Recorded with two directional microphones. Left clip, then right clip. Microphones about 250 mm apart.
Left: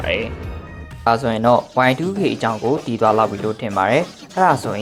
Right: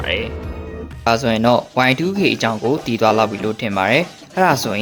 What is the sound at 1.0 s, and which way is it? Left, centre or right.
Speech, centre.